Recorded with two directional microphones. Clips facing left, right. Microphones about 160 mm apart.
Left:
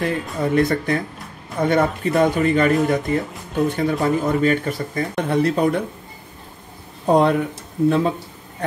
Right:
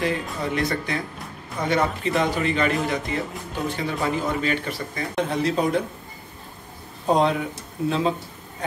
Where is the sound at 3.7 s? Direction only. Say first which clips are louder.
Left 3 dB; 45° left (ahead or behind).